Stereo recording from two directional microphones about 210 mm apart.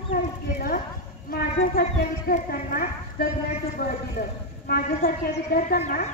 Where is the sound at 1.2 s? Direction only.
45° left (ahead or behind).